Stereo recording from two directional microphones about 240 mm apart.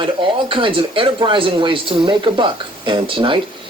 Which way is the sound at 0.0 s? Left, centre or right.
Right.